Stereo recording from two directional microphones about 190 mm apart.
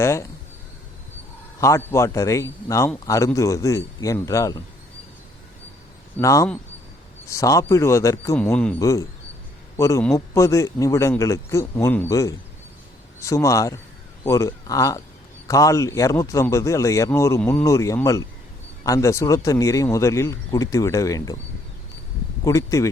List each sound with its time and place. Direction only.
0.0 s speech: 15° left (ahead or behind)
1.6 s speech: 15° left (ahead or behind)
6.1 s speech: 15° left (ahead or behind)
22.4 s speech: 15° left (ahead or behind)